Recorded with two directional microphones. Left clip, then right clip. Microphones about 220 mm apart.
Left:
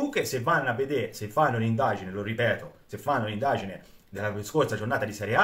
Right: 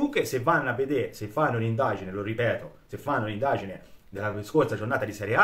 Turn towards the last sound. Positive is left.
turn(degrees=-10)  # may be behind; listen again after turning